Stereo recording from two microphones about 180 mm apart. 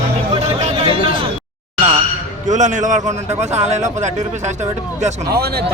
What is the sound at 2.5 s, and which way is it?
A man's voice, 45° right (ahead or behind).